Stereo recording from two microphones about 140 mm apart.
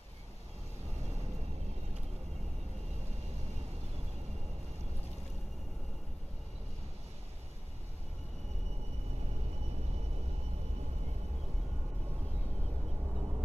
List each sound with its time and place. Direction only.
9.7 s vehicle: 50° right (ahead or behind)
13.0 s vehicle: 15° right (ahead or behind)